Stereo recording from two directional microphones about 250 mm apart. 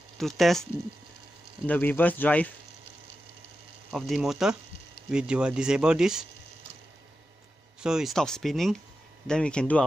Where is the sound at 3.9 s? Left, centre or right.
Centre.